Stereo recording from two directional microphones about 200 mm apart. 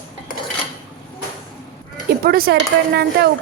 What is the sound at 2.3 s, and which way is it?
Speech, 50° right (ahead or behind).